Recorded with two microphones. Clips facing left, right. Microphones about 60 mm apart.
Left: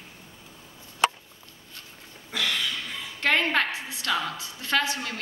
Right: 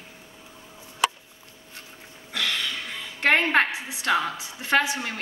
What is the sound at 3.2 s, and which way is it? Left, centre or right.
Speech, right.